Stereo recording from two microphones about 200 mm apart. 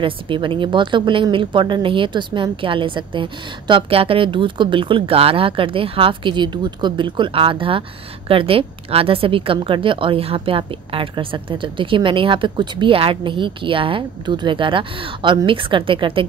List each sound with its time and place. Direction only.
0.0 s a woman's voice: 25° right (ahead or behind)